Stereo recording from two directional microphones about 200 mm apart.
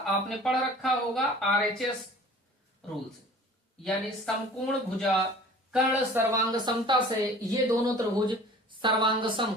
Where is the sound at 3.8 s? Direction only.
5° left (ahead or behind).